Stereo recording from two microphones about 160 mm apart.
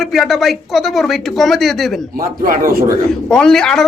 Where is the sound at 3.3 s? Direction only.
5° left (ahead or behind).